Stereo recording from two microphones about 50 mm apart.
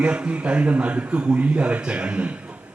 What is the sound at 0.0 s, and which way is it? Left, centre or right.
A man's voice, right.